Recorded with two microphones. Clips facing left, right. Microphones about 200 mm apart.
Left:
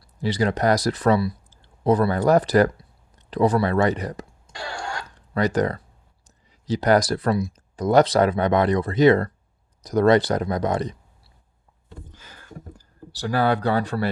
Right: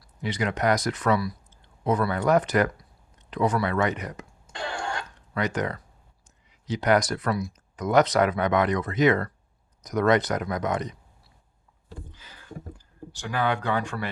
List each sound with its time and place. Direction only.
0.0 s speech: 35° left (ahead or behind)
4.5 s throat clearing: 20° right (ahead or behind)
5.3 s speech: 35° left (ahead or behind)
12.1 s a sound: 45° left (ahead or behind)